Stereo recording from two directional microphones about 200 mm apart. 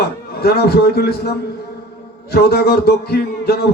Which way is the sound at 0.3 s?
50° left (ahead or behind).